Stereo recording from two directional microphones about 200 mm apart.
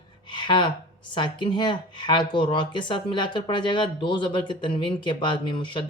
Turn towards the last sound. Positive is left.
turn(degrees=25)  # may be behind; listen again after turning